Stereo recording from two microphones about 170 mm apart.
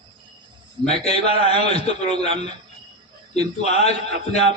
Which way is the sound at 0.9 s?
40° left (ahead or behind).